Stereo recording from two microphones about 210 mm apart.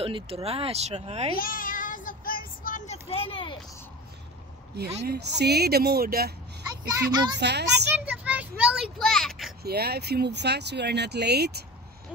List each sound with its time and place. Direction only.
0.0 s speech: 30° right (ahead or behind)
1.3 s child singing: 40° left (ahead or behind); by 3.5 s 25° left (ahead or behind)
5.0 s speech: 50° right (ahead or behind)
6.9 s a child's voice: 15° right (ahead or behind)
7.3 s speech: 55° right (ahead or behind)
8.0 s a child's voice: 5° right (ahead or behind)
9.6 s speech: 50° right (ahead or behind)